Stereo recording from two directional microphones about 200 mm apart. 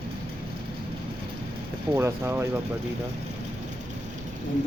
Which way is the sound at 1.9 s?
15° right (ahead or behind).